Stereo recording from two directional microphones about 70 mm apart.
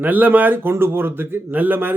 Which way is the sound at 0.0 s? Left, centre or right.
Right.